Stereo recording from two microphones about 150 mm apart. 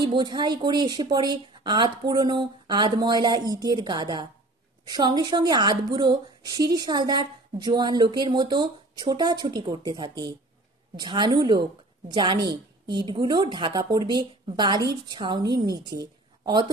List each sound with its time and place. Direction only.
0.0 s a woman's voice: 30° right (ahead or behind)